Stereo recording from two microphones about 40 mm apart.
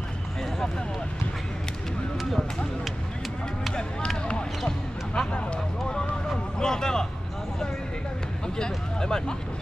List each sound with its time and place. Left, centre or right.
2.1 s speech: centre
4.3 s basketball bounce: centre
5.9 s vehicle: left
8.5 s speech: centre